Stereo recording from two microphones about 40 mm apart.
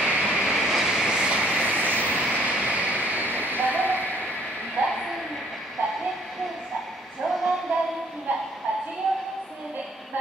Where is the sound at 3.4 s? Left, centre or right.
Right.